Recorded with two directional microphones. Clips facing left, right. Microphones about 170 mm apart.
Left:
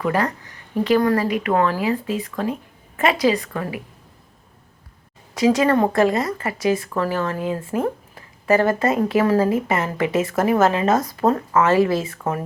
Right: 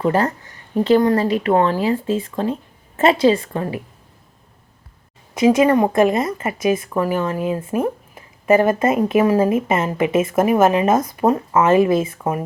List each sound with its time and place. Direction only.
0.0 s speech: 30° right (ahead or behind)
5.3 s speech: 20° right (ahead or behind)